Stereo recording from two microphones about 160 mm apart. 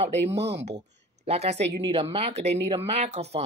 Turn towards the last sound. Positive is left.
turn(degrees=-40)  # may be behind; listen again after turning